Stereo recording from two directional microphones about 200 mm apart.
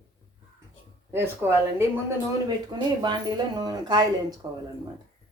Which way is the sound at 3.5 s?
20° right (ahead or behind).